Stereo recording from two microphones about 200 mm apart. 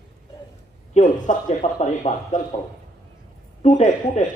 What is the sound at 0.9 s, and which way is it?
A man's voice, 40° left (ahead or behind).